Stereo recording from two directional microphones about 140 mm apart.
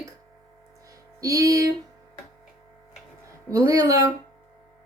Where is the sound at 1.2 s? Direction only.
25° right (ahead or behind).